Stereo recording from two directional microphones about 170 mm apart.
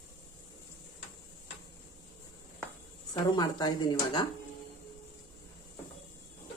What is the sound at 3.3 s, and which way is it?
Speech, 25° left (ahead or behind).